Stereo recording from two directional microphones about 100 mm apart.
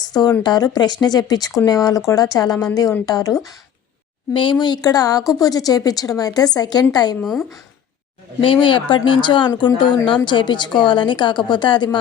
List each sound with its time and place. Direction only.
0.0 s a woman's voice: 40° left (ahead or behind)
4.4 s a woman's voice: 50° left (ahead or behind)
7.2 s speech: 5° left (ahead or behind)
8.6 s speech: 60° left (ahead or behind)